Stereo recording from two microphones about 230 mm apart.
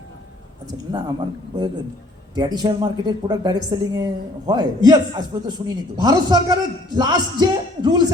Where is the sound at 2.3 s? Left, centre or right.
Centre.